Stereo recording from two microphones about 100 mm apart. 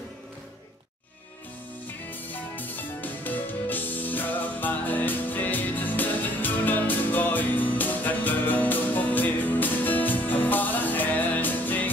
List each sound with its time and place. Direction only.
2.0 s music: 20° left (ahead or behind)